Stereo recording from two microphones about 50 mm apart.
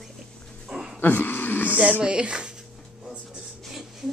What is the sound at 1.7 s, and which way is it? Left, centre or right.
Speech, right.